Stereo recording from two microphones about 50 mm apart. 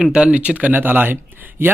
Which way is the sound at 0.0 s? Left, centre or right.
Right.